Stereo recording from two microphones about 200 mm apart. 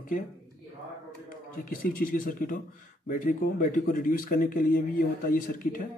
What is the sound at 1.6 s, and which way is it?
Speech, 45° left (ahead or behind).